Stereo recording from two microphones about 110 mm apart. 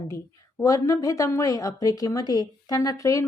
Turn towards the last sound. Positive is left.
turn(degrees=30)  # may be behind; listen again after turning